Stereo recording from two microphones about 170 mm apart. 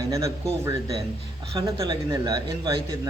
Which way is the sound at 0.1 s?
20° right (ahead or behind).